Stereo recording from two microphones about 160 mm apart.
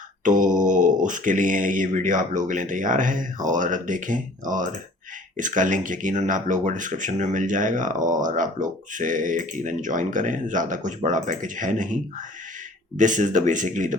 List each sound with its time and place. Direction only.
0.3 s speech: 55° right (ahead or behind)
13.0 s speech: 50° right (ahead or behind)